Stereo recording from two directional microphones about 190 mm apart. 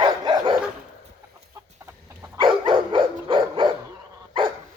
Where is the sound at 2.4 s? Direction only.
25° right (ahead or behind).